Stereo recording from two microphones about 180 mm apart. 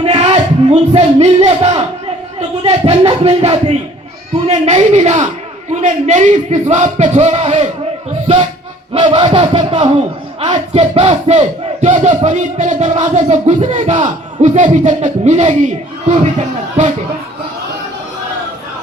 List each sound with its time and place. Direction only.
0.0 s speech: 35° right (ahead or behind)
2.6 s battle cry: 30° right (ahead or behind)
8.9 s a sound: 25° right (ahead or behind)
10.5 s battle cry: 35° right (ahead or behind)